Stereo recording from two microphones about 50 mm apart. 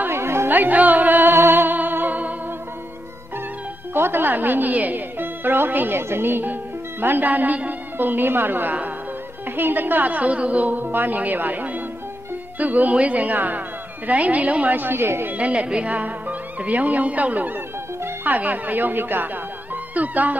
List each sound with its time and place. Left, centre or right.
0.0 s music: right
0.5 s music: right
3.9 s speech: right
15.3 s speech: right
19.7 s music: right